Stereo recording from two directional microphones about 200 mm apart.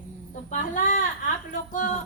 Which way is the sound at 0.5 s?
40° left (ahead or behind).